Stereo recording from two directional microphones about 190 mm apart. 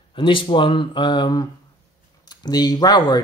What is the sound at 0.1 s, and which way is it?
Speech, 25° left (ahead or behind).